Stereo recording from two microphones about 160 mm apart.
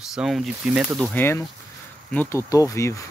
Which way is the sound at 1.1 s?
15° left (ahead or behind).